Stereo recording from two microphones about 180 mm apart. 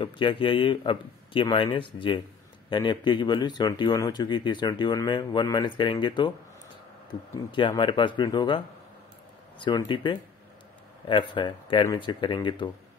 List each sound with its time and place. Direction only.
0.0 s speech: 25° left (ahead or behind)
7.5 s speech: 25° left (ahead or behind)